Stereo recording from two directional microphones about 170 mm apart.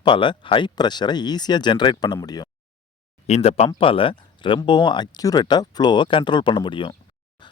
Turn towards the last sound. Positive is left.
turn(degrees=30)  # may be behind; listen again after turning